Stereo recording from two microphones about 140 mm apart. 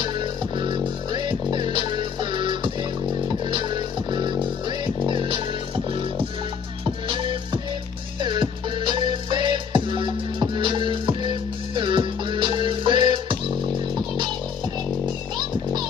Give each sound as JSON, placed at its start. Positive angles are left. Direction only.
{"t": 0.6, "sound": "music", "side_deg": -35}
{"t": 4.1, "sound": "music", "side_deg": -35}
{"t": 6.8, "sound": "music", "side_deg": -35}